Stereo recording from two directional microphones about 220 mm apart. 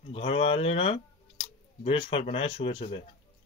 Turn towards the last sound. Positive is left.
turn(degrees=25)  # may be behind; listen again after turning